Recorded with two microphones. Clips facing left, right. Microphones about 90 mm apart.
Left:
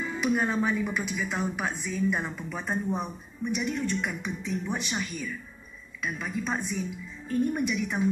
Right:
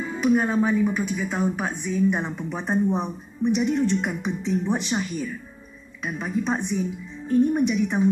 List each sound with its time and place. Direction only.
0.3 s speech: 20° right (ahead or behind)